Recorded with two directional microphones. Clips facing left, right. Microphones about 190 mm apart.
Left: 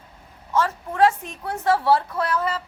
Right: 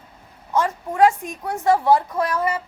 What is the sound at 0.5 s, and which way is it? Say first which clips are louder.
A woman's voice: right 1 dB; 15° right (ahead or behind).